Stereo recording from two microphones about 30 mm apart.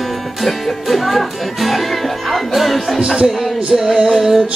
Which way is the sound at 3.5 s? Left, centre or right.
Centre.